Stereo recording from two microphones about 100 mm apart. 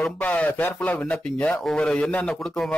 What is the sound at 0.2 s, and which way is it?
A man's voice, 15° left (ahead or behind).